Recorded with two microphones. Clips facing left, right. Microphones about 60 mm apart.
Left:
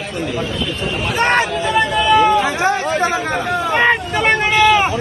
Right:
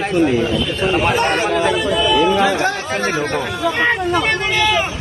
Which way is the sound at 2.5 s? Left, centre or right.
Left.